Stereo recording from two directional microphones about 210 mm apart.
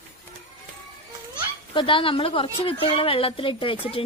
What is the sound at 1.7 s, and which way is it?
Speech, 25° left (ahead or behind).